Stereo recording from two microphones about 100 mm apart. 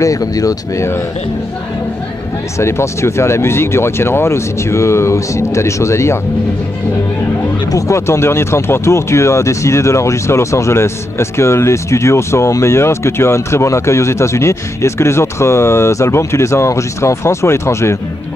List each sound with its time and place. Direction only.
0.0 s speech: 35° left (ahead or behind)
2.6 s speech: 30° left (ahead or behind)
7.7 s speech: 30° left (ahead or behind)